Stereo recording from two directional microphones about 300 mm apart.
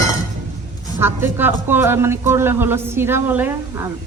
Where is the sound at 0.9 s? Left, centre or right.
Centre.